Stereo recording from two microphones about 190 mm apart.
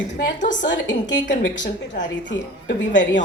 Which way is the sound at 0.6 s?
70° left (ahead or behind).